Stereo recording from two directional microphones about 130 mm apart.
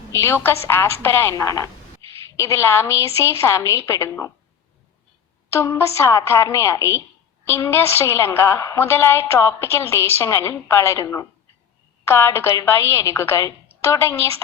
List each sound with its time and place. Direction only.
0.1 s a woman's voice: 20° left (ahead or behind)
5.5 s a woman's voice: 20° left (ahead or behind)